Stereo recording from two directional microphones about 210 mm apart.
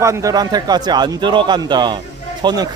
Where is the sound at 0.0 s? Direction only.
15° right (ahead or behind).